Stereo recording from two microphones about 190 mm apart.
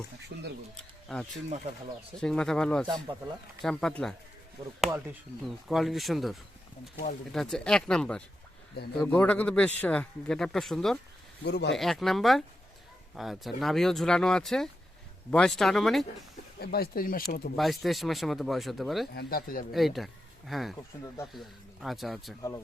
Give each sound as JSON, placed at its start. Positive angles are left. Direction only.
{"t": 0.3, "sound": "a sound", "side_deg": -55}
{"t": 1.0, "sound": "speech", "side_deg": 0}
{"t": 7.3, "sound": "speech", "side_deg": 5}
{"t": 11.4, "sound": "speech", "side_deg": 60}
{"t": 11.7, "sound": "speech", "side_deg": 0}
{"t": 16.6, "sound": "speech", "side_deg": 55}
{"t": 17.6, "sound": "speech", "side_deg": 0}
{"t": 19.1, "sound": "speech", "side_deg": 55}
{"t": 19.7, "sound": "speech", "side_deg": 0}
{"t": 22.4, "sound": "speech", "side_deg": 15}